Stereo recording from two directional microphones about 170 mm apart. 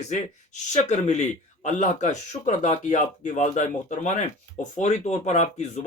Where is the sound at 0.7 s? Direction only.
45° left (ahead or behind).